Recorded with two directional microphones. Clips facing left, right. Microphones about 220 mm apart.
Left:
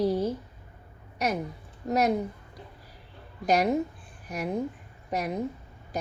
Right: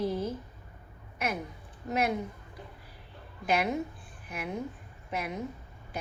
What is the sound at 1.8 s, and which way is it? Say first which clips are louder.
Speech: left 5 dB; 40° left (ahead or behind).